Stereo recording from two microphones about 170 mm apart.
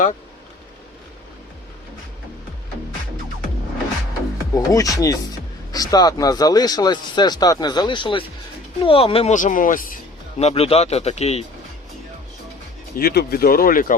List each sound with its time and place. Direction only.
4.5 s speech: 20° left (ahead or behind); by 10.0 s 55° left (ahead or behind)
10.3 s a man's voice: 35° left (ahead or behind)
13.0 s speech: 60° left (ahead or behind)